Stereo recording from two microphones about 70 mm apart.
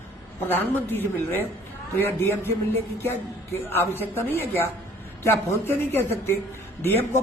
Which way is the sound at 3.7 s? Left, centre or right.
Left.